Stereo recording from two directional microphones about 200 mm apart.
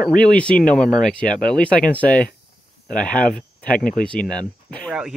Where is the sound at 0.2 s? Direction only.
5° left (ahead or behind).